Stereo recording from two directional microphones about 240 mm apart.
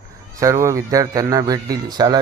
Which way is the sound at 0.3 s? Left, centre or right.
Centre.